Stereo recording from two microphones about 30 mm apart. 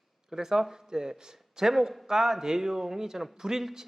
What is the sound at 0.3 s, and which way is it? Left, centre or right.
A man's voice, centre.